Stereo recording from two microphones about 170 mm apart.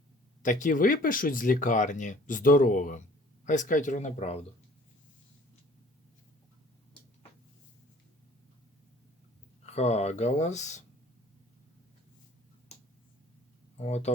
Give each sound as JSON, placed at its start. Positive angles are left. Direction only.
{"t": 0.4, "sound": "speech", "side_deg": 50}
{"t": 9.6, "sound": "speech", "side_deg": 40}
{"t": 13.7, "sound": "speech", "side_deg": 40}